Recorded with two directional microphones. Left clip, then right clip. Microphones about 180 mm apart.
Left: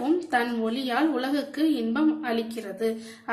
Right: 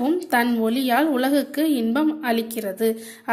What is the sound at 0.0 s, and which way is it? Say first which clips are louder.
A woman's voice: right 4 dB; 45° right (ahead or behind).